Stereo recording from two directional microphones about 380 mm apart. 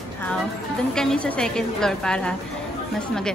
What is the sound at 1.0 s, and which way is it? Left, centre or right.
A woman's voice, centre.